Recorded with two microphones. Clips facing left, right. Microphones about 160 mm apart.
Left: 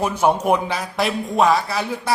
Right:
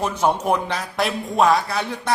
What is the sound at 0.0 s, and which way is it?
Speech, 10° left (ahead or behind).